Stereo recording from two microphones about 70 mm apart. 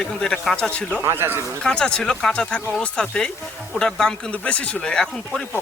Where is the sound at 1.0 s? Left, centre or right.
Right.